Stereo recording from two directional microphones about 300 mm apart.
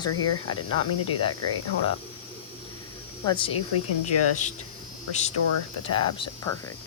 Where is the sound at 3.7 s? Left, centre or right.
Left.